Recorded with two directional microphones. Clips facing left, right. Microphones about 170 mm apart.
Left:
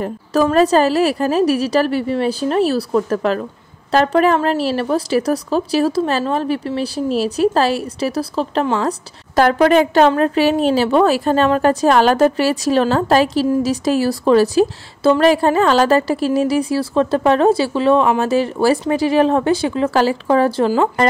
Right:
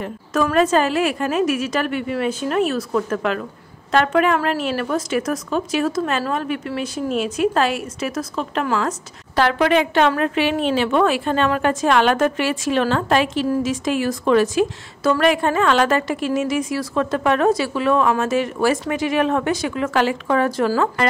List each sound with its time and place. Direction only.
0.0 s speech: 35° left (ahead or behind)